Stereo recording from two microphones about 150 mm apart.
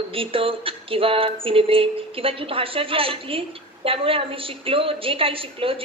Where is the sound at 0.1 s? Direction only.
35° right (ahead or behind).